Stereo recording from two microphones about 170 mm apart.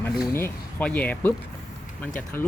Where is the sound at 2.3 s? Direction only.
10° left (ahead or behind).